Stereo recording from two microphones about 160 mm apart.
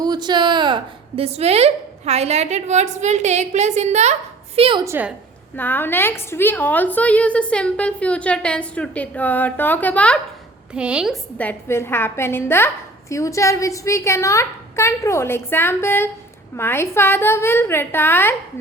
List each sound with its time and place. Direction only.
0.0 s a woman's voice: 25° right (ahead or behind)
4.8 s a woman's voice: 15° right (ahead or behind)
5.5 s a woman's voice: 10° left (ahead or behind)
10.8 s a woman's voice: 5° right (ahead or behind)
11.3 s a woman's voice: 15° left (ahead or behind)